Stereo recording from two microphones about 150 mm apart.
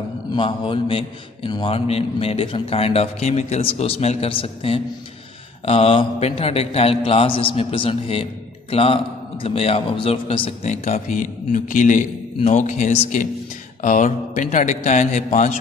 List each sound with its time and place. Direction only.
0.3 s a man's voice: 35° left (ahead or behind); by 15.5 s 55° left (ahead or behind)